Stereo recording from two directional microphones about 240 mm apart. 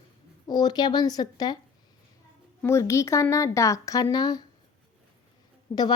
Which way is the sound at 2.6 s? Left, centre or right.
Centre.